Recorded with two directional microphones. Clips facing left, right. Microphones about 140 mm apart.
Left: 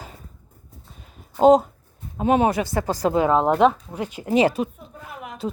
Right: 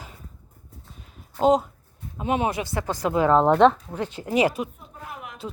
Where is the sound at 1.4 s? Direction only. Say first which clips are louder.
Left 5 dB; 40° left (ahead or behind).